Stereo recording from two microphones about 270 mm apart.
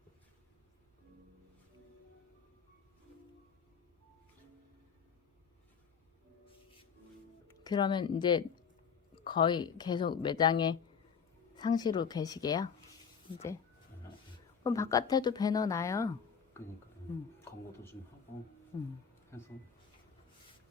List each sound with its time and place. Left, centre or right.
7.4 s a woman's voice: centre
14.6 s a woman's voice: centre
17.4 s a woman's voice: centre